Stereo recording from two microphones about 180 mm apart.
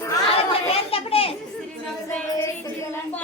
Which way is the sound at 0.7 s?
30° left (ahead or behind).